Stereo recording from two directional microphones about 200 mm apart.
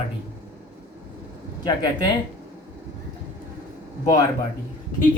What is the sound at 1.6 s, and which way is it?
Speech, 20° left (ahead or behind).